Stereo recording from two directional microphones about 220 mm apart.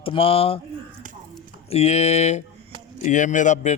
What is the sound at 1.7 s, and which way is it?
A man's voice, 30° left (ahead or behind).